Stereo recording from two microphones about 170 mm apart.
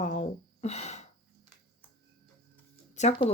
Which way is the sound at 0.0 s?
45° left (ahead or behind).